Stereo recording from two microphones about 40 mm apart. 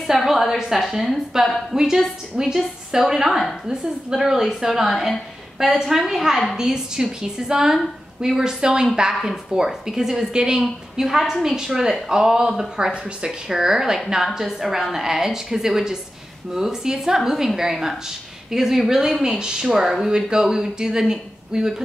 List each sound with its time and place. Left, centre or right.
0.0 s a woman's voice: centre